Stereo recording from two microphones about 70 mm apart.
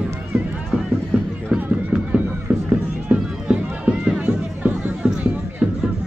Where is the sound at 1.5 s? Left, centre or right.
Centre.